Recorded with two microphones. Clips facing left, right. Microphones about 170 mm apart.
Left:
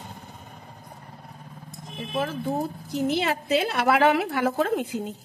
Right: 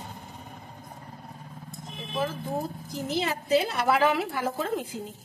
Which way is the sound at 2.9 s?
65° left (ahead or behind).